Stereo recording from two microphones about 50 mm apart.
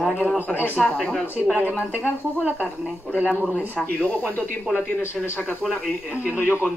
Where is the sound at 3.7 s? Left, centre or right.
Left.